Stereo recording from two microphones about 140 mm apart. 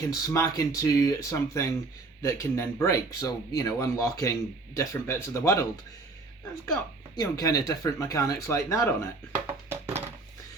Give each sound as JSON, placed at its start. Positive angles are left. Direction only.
{"t": 0.1, "sound": "speech", "side_deg": 25}
{"t": 7.2, "sound": "speech", "side_deg": 25}
{"t": 9.5, "sound": "a sound", "side_deg": -15}